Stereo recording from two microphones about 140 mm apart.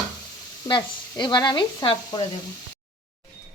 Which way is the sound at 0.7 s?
30° left (ahead or behind).